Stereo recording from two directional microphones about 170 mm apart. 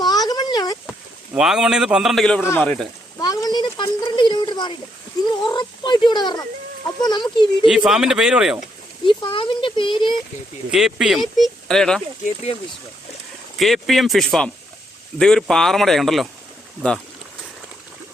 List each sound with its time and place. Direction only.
0.0 s a sound: 25° left (ahead or behind)
1.3 s a man's voice: 5° right (ahead or behind)
3.2 s speech: 25° left (ahead or behind)
7.7 s speech: 5° right (ahead or behind)
9.0 s speech: 30° left (ahead or behind)
10.7 s speech: 5° right (ahead or behind)
13.6 s speech: centre (ahead or behind)